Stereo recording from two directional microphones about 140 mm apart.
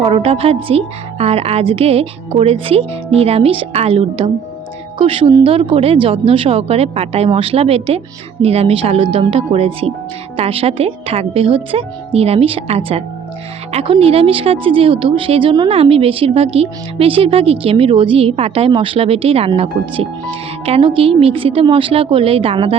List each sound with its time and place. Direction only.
0.0 s a woman's voice: 40° right (ahead or behind)